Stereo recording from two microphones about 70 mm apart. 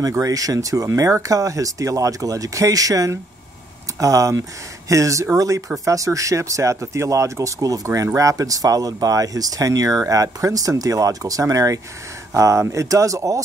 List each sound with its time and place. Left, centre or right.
0.0 s speech: right